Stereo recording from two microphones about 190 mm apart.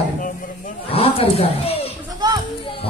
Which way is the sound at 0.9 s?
30° left (ahead or behind).